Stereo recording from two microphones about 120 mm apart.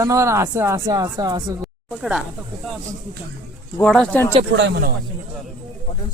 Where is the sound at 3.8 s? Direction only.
5° left (ahead or behind).